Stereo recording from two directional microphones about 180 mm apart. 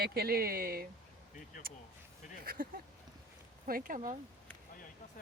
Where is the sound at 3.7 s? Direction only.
50° right (ahead or behind).